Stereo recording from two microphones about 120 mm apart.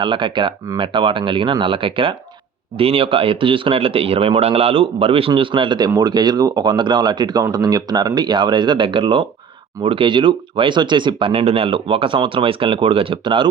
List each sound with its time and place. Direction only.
0.0 s speech: 40° right (ahead or behind)